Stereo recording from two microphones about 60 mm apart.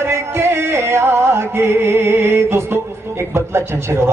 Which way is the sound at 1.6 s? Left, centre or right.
Right.